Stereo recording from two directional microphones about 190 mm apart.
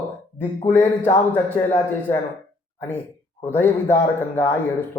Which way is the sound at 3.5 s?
10° left (ahead or behind).